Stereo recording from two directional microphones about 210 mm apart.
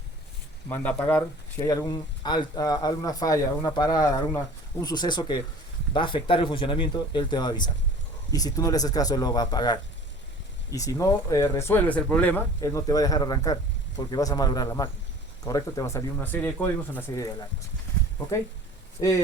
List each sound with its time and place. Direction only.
0.7 s speech: 10° left (ahead or behind)
19.0 s speech: 20° left (ahead or behind)